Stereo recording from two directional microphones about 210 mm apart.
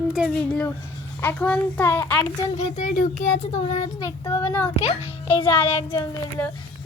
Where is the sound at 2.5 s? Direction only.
35° left (ahead or behind).